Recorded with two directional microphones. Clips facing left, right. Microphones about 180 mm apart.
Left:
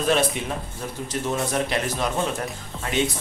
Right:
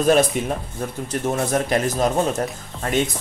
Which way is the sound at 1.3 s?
45° right (ahead or behind).